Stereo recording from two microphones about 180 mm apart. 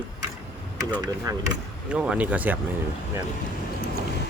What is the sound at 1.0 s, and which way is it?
Speech, 20° right (ahead or behind).